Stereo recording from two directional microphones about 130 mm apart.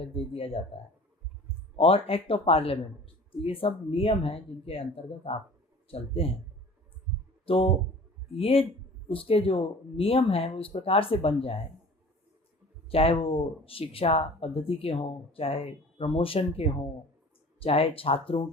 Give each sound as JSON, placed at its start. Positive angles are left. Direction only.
{"t": 0.0, "sound": "speech", "side_deg": 45}
{"t": 7.4, "sound": "speech", "side_deg": 45}
{"t": 12.9, "sound": "speech", "side_deg": 45}